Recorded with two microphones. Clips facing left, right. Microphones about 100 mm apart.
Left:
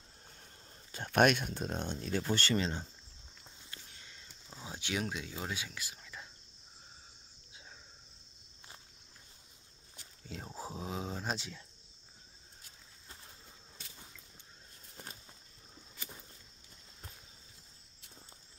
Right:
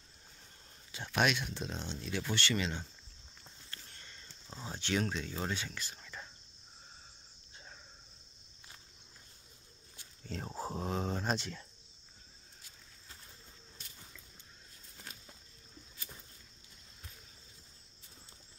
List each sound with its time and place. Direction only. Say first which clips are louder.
0.9 s speech: left 5 dB; 50° left (ahead or behind)
3.4 s a sound: even; 5° left (ahead or behind)
4.6 s speech: right 3 dB; 10° left (ahead or behind)
10.3 s speech: right 4 dB; 10° left (ahead or behind)